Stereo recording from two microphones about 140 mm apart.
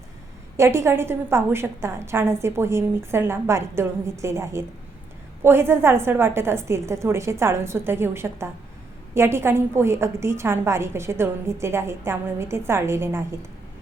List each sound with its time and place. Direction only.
0.5 s a woman's voice: 20° right (ahead or behind)